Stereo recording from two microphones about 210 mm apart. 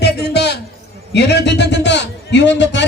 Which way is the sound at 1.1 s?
55° left (ahead or behind).